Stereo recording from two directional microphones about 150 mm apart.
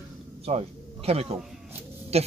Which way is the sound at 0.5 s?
45° right (ahead or behind).